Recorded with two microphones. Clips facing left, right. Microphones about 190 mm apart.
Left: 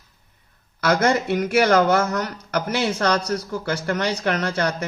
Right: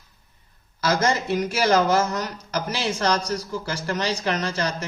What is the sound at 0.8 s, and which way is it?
Speech, 60° left (ahead or behind).